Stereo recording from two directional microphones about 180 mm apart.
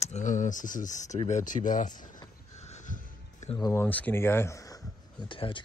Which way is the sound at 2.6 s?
40° left (ahead or behind).